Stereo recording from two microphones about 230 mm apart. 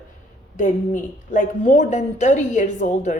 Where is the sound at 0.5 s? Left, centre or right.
Left.